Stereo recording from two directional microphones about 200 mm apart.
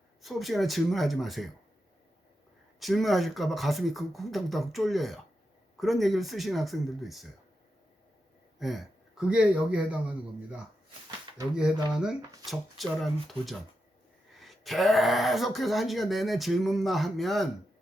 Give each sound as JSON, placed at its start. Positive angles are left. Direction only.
{"t": 0.2, "sound": "speech", "side_deg": 0}
{"t": 2.8, "sound": "speech", "side_deg": 0}
{"t": 8.5, "sound": "speech", "side_deg": 0}